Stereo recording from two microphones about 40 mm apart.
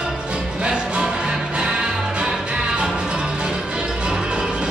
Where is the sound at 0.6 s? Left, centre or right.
Right.